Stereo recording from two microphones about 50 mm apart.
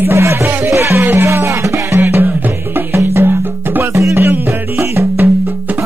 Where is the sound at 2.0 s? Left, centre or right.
Right.